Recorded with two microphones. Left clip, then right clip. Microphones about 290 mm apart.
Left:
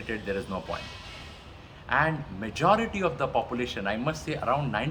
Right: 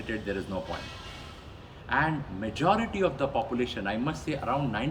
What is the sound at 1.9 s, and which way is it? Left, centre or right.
A man's voice, centre.